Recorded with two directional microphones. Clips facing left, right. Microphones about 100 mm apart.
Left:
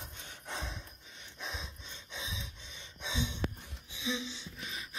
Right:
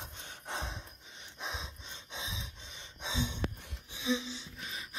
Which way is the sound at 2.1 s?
30° right (ahead or behind).